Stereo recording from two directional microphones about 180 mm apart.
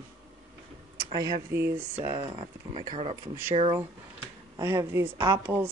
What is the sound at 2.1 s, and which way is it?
Speech, 25° right (ahead or behind).